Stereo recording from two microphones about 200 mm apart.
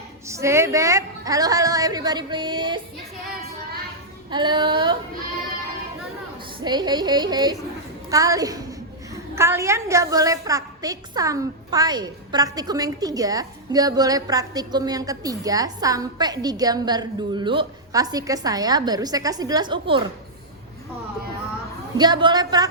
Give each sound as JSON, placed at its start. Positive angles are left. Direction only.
{"t": 0.3, "sound": "a woman's voice", "side_deg": -15}
{"t": 4.3, "sound": "a woman's voice", "side_deg": -25}
{"t": 6.7, "sound": "a woman's voice", "side_deg": -20}
{"t": 21.9, "sound": "a woman's voice", "side_deg": -20}